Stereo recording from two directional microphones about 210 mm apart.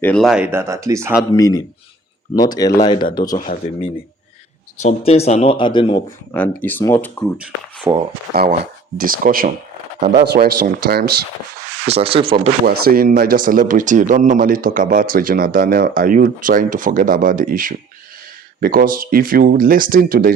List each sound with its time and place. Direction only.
0.0 s speech: 5° left (ahead or behind); by 1.2 s 15° right (ahead or behind)
1.4 s speech: 15° left (ahead or behind)
3.3 s speech: 40° left (ahead or behind)
4.8 s speech: 30° left (ahead or behind)
6.3 s speech: 5° left (ahead or behind)
7.3 s speech: 5° right (ahead or behind)
9.0 s speech: 40° right (ahead or behind)
11.9 s speech: 30° right (ahead or behind)
12.8 s speech: 45° right (ahead or behind)